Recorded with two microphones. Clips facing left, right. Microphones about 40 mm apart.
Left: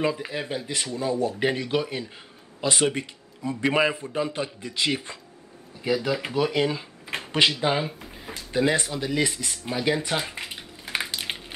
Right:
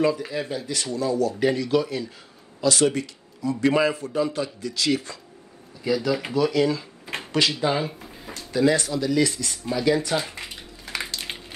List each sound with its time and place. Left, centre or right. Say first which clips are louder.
0.0 s speech: right 3 dB; left
7.6 s speech: right 1 dB; centre
8.3 s speech: right 2 dB; left
9.7 s a sound: right 3 dB; left